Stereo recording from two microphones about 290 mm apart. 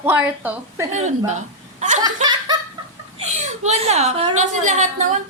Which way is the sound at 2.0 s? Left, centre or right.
Centre.